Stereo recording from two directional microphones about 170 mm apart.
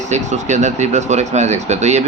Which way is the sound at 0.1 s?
45° right (ahead or behind).